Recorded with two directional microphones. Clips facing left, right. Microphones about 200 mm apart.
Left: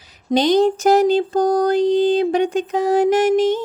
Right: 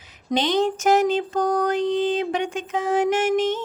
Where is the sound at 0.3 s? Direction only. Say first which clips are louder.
Left 6 dB; 35° left (ahead or behind).